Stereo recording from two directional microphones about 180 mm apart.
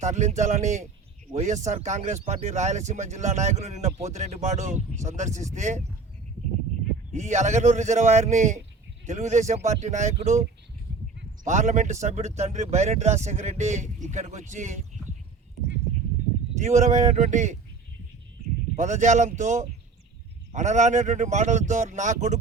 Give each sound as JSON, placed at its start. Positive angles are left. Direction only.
{"t": 0.0, "sound": "speech", "side_deg": -40}
{"t": 7.1, "sound": "speech", "side_deg": -40}
{"t": 11.4, "sound": "speech", "side_deg": -40}
{"t": 16.6, "sound": "speech", "side_deg": -40}
{"t": 18.8, "sound": "speech", "side_deg": -40}